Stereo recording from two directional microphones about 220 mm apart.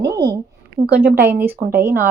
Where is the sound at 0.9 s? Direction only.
45° right (ahead or behind).